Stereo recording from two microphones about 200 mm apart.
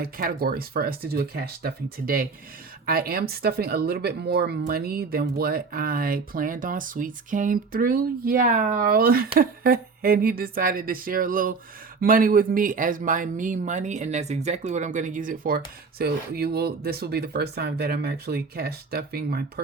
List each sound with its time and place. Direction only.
0.0 s speech: 45° right (ahead or behind)